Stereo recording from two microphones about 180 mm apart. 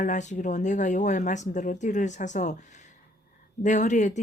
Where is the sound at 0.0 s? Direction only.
40° left (ahead or behind).